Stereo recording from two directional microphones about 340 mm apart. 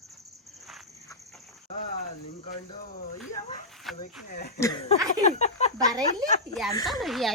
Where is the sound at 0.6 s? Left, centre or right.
Centre.